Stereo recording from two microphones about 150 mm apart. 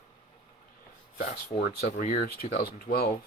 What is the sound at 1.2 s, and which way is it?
Speech, 50° left (ahead or behind).